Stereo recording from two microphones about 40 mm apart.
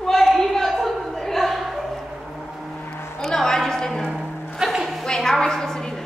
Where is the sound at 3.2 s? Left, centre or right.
Centre.